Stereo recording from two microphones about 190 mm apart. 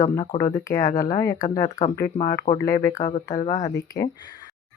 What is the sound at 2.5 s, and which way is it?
Speech, 15° left (ahead or behind).